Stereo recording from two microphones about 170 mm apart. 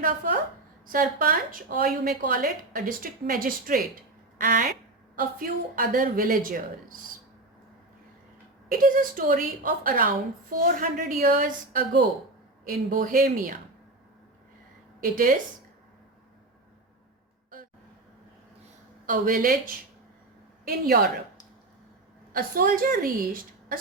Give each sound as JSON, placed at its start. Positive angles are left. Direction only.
{"t": 0.9, "sound": "a woman's voice", "side_deg": -50}
{"t": 8.7, "sound": "a woman's voice", "side_deg": -55}
{"t": 15.0, "sound": "a woman's voice", "side_deg": -55}
{"t": 19.0, "sound": "a woman's voice", "side_deg": -55}
{"t": 22.3, "sound": "a woman's voice", "side_deg": -55}